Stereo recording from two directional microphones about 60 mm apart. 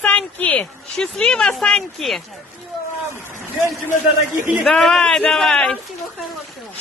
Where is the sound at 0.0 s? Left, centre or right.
Left.